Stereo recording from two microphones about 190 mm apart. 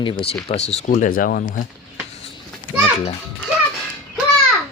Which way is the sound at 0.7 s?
35° left (ahead or behind).